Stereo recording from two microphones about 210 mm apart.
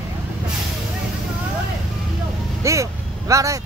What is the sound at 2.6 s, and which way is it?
Vehicle, 15° right (ahead or behind).